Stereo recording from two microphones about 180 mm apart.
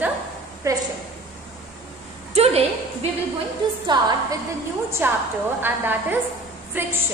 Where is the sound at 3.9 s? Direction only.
25° right (ahead or behind).